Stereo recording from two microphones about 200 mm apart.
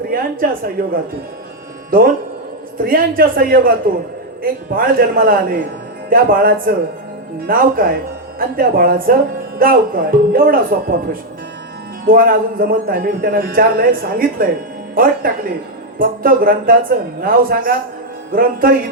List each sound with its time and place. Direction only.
0.1 s a man's voice: 50° right (ahead or behind)
2.7 s a man's voice: 45° right (ahead or behind)